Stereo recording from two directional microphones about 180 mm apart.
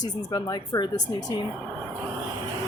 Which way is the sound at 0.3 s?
25° left (ahead or behind).